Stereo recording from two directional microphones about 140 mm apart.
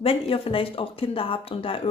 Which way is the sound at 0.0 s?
40° left (ahead or behind).